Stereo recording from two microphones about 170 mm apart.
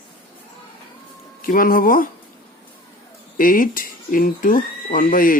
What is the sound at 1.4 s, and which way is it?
Speech, 55° left (ahead or behind).